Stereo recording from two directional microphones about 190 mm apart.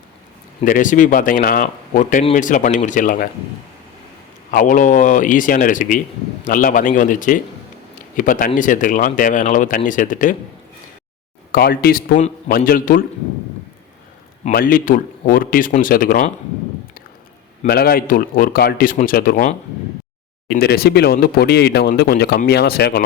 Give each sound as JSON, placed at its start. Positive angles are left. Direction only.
{"t": 0.6, "sound": "speech", "side_deg": 45}
{"t": 4.5, "sound": "speech", "side_deg": 45}
{"t": 11.5, "sound": "speech", "side_deg": 50}
{"t": 14.4, "sound": "speech", "side_deg": 50}
{"t": 17.7, "sound": "speech", "side_deg": 55}